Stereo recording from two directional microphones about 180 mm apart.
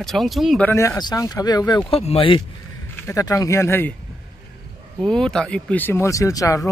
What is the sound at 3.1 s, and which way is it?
Speech, 15° left (ahead or behind).